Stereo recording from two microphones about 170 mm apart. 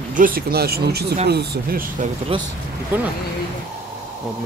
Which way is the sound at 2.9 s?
10° right (ahead or behind).